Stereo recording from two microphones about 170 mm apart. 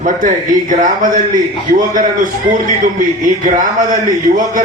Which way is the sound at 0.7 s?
50° right (ahead or behind).